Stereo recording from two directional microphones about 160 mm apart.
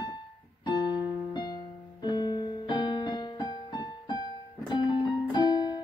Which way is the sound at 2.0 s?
25° left (ahead or behind).